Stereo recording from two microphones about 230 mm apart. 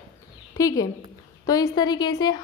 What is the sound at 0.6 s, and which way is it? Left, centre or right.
A woman's voice, centre.